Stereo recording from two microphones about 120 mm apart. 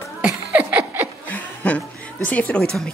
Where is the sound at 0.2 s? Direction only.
10° right (ahead or behind).